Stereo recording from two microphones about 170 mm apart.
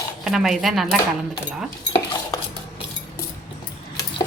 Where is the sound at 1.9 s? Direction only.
20° left (ahead or behind).